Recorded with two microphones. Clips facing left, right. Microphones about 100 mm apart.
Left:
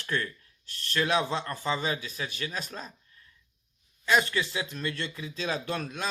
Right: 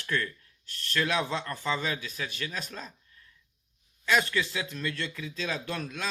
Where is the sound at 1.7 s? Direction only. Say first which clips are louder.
Left 1 dB; 25° left (ahead or behind).